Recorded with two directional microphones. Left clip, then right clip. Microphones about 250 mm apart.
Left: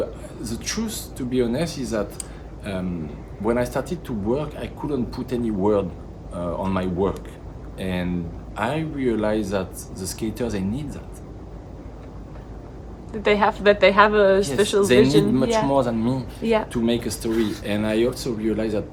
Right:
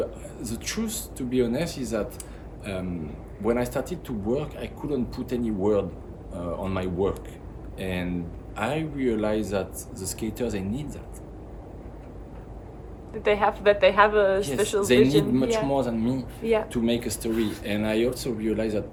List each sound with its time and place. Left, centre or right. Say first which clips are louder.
0.4 s a man's voice: left 3 dB; centre
13.2 s a woman's voice: left 3 dB; left
15.7 s a man's voice: left 5 dB; centre
16.4 s a woman's voice: left 3 dB; left
16.7 s a man's voice: left 3 dB; centre